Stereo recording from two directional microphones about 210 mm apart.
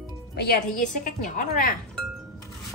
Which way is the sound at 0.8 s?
35° left (ahead or behind).